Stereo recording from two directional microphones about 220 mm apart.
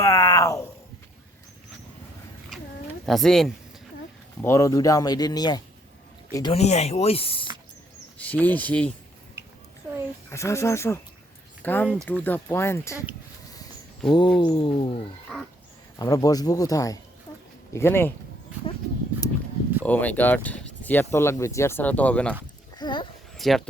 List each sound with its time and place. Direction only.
0.0 s a sound: 15° left (ahead or behind)
3.1 s a woman's voice: centre (ahead or behind)
4.4 s speech: 15° left (ahead or behind)
8.2 s speech: 10° left (ahead or behind)
9.4 s a sound: 10° right (ahead or behind)
10.2 s speech: 15° left (ahead or behind)
14.1 s speech: 20° left (ahead or behind)
15.3 s a woman's voice: centre (ahead or behind)
16.0 s speech: 15° left (ahead or behind)
19.8 s speech: 5° left (ahead or behind)
22.8 s speech: 20° left (ahead or behind)
23.4 s speech: centre (ahead or behind)